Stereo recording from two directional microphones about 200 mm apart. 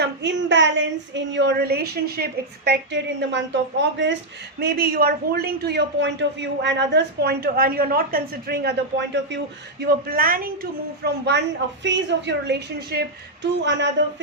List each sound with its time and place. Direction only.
0.0 s a woman's voice: 60° right (ahead or behind)
4.6 s a man's voice: 50° right (ahead or behind)
9.8 s a man's voice: 45° right (ahead or behind)
11.8 s a woman's voice: 60° right (ahead or behind)